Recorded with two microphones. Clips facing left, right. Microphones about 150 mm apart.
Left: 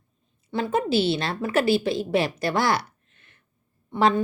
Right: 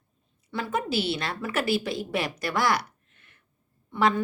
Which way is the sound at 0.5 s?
30° left (ahead or behind).